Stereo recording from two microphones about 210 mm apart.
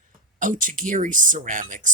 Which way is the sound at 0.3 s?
40° right (ahead or behind).